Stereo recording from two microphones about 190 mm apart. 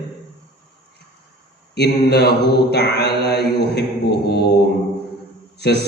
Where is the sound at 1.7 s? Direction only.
60° left (ahead or behind).